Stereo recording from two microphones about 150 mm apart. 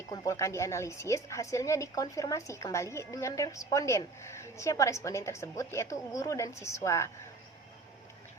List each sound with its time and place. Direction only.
0.1 s a woman's voice: 20° left (ahead or behind)